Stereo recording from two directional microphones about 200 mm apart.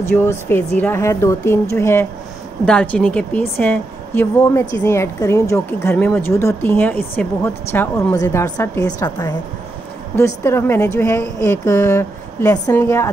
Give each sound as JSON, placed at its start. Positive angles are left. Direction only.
{"t": 0.0, "sound": "speech", "side_deg": 10}